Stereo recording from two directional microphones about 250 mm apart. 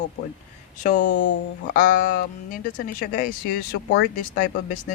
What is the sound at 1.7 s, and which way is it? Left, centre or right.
Speech, left.